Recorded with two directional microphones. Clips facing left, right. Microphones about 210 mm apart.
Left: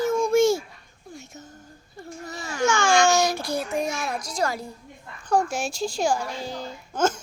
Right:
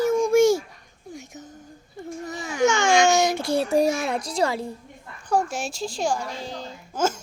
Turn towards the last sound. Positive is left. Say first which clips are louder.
# left 1 dB
turn(degrees=-5)  # may be behind; listen again after turning